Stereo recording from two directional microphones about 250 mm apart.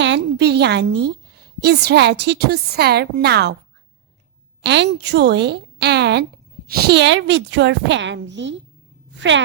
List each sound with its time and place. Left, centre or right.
0.0 s a woman's voice: right
4.6 s a woman's voice: right